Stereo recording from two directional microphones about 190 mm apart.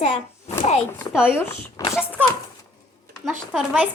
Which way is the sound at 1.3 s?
10° left (ahead or behind).